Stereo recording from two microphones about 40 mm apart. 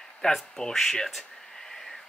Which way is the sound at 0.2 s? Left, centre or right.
Centre.